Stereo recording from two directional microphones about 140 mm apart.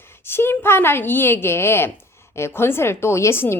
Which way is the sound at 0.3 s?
15° left (ahead or behind).